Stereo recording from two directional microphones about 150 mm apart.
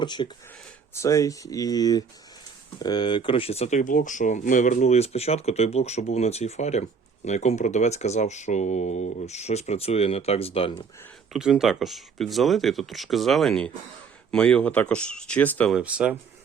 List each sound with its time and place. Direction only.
0.0 s speech: 30° left (ahead or behind)
3.8 s speech: 60° left (ahead or behind); by 10.7 s 40° left (ahead or behind)
11.3 s speech: 5° right (ahead or behind)
15.7 s speech: 5° right (ahead or behind)